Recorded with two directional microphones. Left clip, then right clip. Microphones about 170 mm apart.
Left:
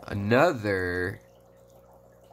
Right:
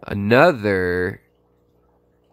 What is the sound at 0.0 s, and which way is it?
Speech, 50° right (ahead or behind).